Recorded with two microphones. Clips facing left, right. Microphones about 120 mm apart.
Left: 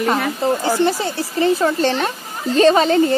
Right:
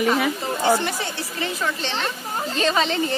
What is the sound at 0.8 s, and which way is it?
Speech, 30° left (ahead or behind).